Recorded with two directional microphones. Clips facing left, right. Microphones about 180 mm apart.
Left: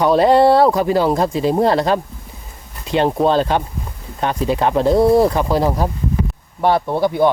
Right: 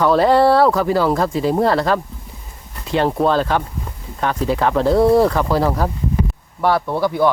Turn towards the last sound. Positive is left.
turn(degrees=20)  # may be behind; listen again after turning